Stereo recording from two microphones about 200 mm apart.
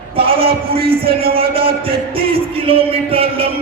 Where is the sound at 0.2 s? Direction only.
30° right (ahead or behind).